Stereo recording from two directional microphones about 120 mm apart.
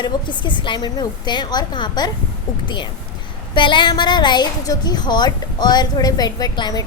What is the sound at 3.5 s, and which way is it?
A woman's voice, 40° left (ahead or behind).